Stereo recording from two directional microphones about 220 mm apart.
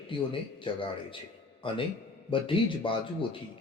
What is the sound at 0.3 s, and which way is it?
Speech, 25° left (ahead or behind).